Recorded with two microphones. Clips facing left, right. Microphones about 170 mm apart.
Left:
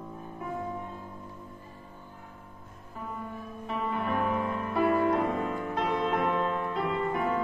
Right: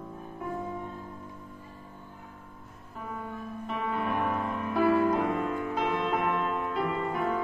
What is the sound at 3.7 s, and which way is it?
Music, centre (ahead or behind).